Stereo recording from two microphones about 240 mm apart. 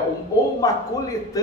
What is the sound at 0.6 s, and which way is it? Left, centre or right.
Speech, centre.